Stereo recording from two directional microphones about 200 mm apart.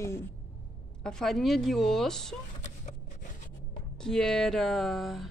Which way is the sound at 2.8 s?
40° left (ahead or behind).